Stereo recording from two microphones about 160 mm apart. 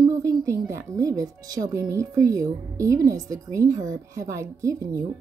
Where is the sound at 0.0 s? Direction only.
20° right (ahead or behind).